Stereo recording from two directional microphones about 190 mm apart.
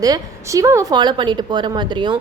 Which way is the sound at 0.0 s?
20° right (ahead or behind).